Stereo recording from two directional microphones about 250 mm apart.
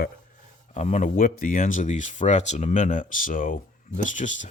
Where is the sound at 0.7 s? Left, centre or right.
Left.